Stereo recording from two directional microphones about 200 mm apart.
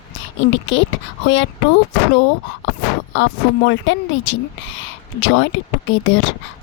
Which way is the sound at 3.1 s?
65° left (ahead or behind).